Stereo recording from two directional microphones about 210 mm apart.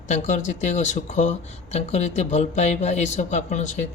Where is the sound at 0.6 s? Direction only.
35° left (ahead or behind).